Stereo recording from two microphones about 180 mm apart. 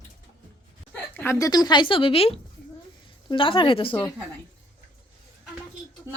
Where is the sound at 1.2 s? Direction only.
15° left (ahead or behind).